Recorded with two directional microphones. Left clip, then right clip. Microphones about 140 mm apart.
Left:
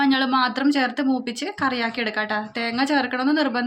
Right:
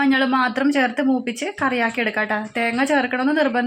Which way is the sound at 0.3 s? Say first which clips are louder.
Right 1 dB; 35° right (ahead or behind).